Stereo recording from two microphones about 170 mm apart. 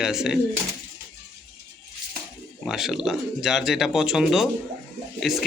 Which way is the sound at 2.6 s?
Centre (ahead or behind).